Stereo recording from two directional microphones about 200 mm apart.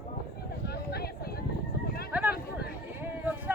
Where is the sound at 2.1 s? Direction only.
5° right (ahead or behind).